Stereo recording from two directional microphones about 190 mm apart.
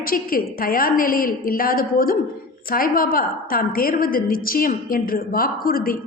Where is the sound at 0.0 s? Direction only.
50° left (ahead or behind).